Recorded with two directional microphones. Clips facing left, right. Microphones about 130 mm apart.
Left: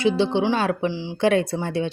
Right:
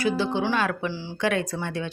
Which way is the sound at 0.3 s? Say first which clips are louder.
Left 4 dB; 30° left (ahead or behind).